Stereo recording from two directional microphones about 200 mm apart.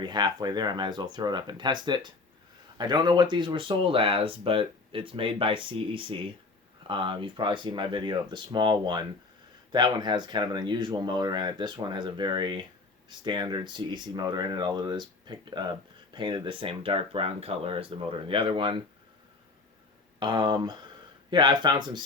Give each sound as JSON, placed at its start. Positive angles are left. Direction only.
{"t": 0.0, "sound": "speech", "side_deg": -20}
{"t": 20.1, "sound": "speech", "side_deg": -20}